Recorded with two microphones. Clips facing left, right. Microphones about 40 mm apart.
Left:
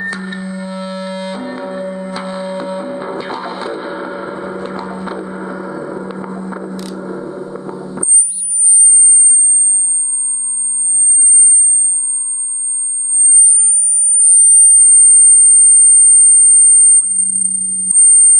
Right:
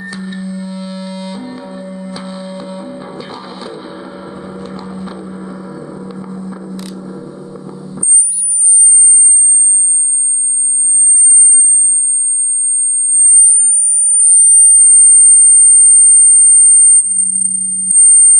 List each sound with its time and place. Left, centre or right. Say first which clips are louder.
0.0 s music: left 2 dB; left
7.0 s a sound: left 4 dB; centre
10.5 s sine wave: right 4 dB; left
17.0 s sine wave: right 1 dB; left
17.5 s sine wave: right 1 dB; left